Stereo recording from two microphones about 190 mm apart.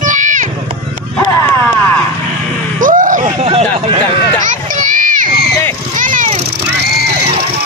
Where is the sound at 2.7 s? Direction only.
45° right (ahead or behind).